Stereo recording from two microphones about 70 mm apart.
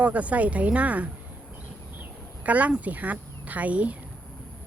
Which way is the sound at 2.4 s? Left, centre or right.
Right.